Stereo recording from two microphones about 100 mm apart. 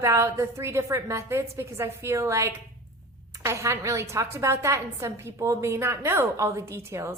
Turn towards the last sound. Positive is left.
turn(degrees=-30)  # may be behind; listen again after turning